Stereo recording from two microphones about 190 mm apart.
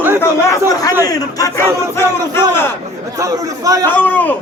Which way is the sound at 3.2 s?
15° right (ahead or behind).